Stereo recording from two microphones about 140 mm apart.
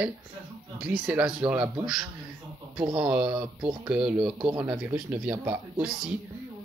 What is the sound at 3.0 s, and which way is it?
Speech, 10° right (ahead or behind).